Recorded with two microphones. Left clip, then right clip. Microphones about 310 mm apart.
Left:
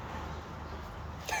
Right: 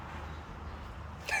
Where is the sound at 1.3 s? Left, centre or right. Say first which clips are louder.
Right 2 dB; centre.